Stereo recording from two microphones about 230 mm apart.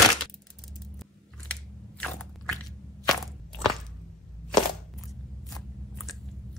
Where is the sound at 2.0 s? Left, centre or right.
Centre.